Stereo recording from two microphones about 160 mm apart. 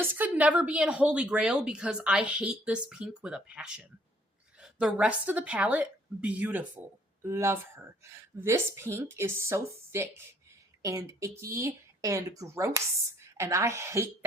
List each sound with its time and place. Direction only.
0.0 s a woman's voice: 10° right (ahead or behind)